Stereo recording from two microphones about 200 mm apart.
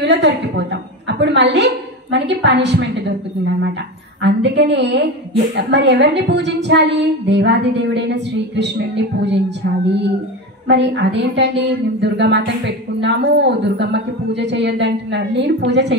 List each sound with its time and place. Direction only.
0.0 s a woman's voice: 60° right (ahead or behind)
4.2 s a woman's voice: 60° right (ahead or behind)
10.7 s a woman's voice: 60° right (ahead or behind)